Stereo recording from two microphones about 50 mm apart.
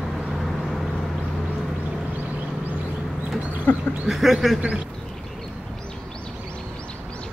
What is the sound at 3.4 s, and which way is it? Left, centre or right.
Bird, right.